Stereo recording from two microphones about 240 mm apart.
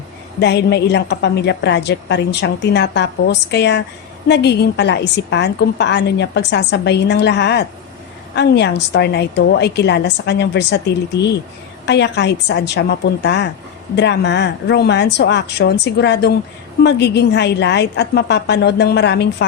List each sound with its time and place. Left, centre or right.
0.3 s a woman's voice: left